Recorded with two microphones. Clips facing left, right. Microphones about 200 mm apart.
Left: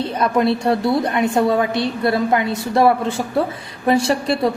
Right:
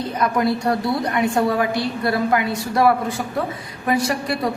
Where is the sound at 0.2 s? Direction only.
25° left (ahead or behind).